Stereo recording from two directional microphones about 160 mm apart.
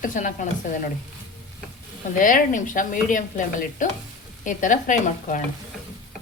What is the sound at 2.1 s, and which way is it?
A woman's voice, 55° left (ahead or behind).